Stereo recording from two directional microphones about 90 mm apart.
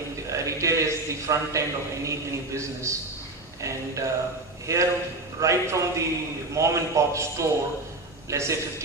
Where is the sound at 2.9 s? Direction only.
30° right (ahead or behind).